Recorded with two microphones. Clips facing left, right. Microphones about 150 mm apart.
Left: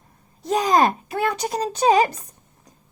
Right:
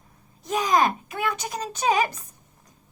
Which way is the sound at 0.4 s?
35° left (ahead or behind).